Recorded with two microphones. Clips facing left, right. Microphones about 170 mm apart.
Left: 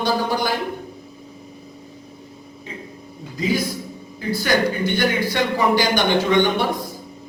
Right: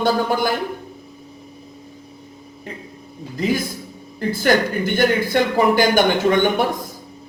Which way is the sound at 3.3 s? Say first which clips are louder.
Right 1 dB; 50° right (ahead or behind).